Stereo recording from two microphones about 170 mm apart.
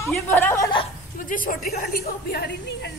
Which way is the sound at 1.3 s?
55° left (ahead or behind).